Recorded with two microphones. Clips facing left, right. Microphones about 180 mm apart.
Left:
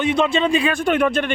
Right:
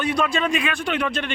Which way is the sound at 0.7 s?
50° left (ahead or behind).